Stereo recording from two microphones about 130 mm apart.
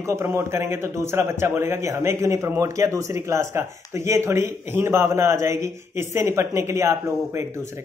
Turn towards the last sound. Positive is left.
turn(degrees=-20)  # may be behind; listen again after turning